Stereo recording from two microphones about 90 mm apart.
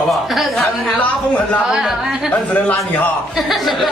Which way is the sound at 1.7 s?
5° right (ahead or behind).